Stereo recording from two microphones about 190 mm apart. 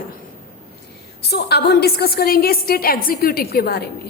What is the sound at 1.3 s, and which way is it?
A woman's voice, 60° left (ahead or behind).